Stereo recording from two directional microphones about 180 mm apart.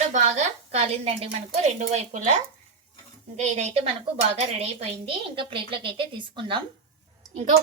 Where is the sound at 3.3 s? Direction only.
40° right (ahead or behind).